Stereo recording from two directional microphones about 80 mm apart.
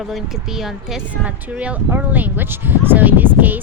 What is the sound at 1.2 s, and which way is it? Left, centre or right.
Speech, centre.